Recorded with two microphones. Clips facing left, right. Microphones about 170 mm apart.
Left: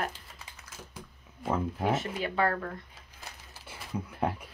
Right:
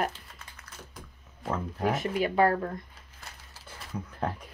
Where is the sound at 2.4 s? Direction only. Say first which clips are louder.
Right 4 dB; 30° right (ahead or behind).